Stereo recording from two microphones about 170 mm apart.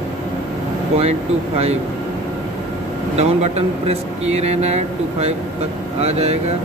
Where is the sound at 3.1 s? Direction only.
40° right (ahead or behind).